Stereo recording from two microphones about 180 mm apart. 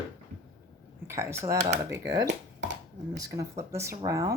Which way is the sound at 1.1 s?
15° right (ahead or behind).